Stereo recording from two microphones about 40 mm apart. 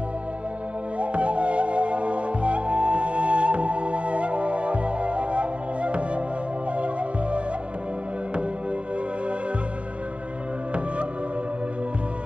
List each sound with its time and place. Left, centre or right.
0.9 s music: right